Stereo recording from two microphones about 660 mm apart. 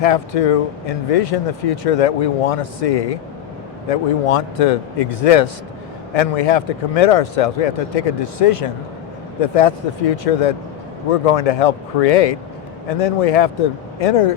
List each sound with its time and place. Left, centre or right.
0.0 s speech: left